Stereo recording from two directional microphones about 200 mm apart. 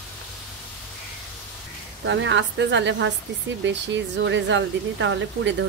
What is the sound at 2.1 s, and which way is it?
Speech, 65° right (ahead or behind).